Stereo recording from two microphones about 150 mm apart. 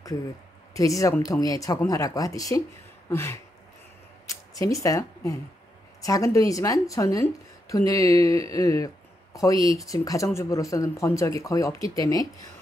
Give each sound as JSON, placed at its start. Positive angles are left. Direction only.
{"t": 0.7, "sound": "a woman's voice", "side_deg": 20}
{"t": 3.1, "sound": "a sound", "side_deg": 15}
{"t": 4.3, "sound": "a woman's voice", "side_deg": 20}